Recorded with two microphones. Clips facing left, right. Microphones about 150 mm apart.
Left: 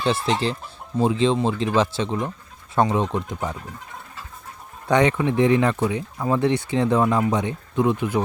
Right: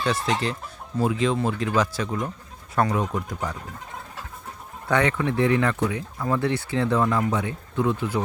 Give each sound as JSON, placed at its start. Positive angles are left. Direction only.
{"t": 0.0, "sound": "speech", "side_deg": 30}
{"t": 4.9, "sound": "speech", "side_deg": 15}